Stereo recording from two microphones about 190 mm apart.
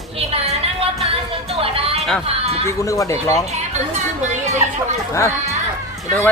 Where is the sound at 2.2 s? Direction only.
30° right (ahead or behind).